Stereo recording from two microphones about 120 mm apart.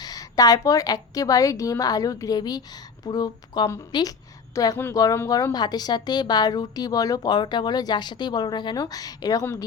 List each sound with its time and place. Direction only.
0.0 s a woman's voice: 30° left (ahead or behind)